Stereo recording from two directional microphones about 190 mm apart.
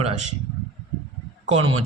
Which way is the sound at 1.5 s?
30° right (ahead or behind).